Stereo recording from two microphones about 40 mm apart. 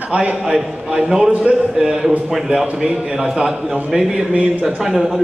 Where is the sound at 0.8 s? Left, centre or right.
Centre.